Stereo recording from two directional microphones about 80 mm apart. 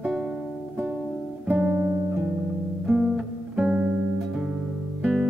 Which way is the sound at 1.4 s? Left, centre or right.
Centre.